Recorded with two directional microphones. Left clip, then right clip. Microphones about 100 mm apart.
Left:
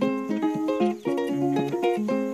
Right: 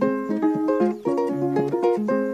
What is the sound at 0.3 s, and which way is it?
Music, 25° left (ahead or behind).